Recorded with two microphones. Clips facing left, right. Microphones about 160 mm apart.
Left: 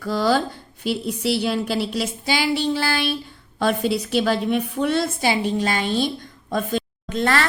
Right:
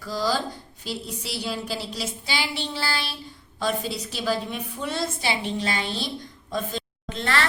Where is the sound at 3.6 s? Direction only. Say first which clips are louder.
Left 6 dB; 65° left (ahead or behind).